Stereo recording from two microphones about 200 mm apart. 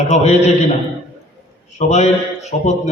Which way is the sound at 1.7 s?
35° left (ahead or behind).